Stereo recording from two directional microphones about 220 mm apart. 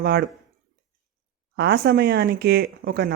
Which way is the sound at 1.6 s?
45° right (ahead or behind).